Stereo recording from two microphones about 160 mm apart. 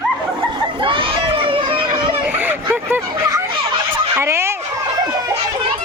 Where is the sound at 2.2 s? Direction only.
10° right (ahead or behind).